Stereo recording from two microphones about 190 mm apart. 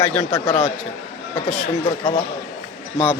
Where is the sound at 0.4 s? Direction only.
35° left (ahead or behind).